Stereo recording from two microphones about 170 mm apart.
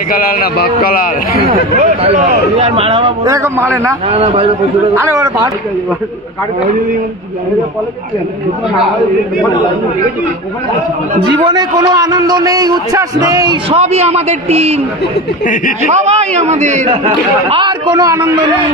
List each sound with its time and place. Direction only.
0.1 s a man's voice: 60° left (ahead or behind)
1.8 s speech: 45° right (ahead or behind)
3.3 s a man's voice: 20° right (ahead or behind)
4.1 s speech: 35° right (ahead or behind)
4.9 s a man's voice: 20° right (ahead or behind)
11.3 s a man's voice: 25° right (ahead or behind)
13.7 s speech: 40° right (ahead or behind)
15.9 s a man's voice: 40° right (ahead or behind)
17.5 s a man's voice: 30° right (ahead or behind)